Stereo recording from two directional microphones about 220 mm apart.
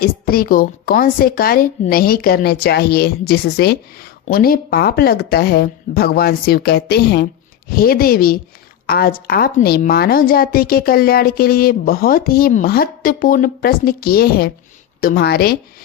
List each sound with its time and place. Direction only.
0.0 s a woman's voice: 40° left (ahead or behind)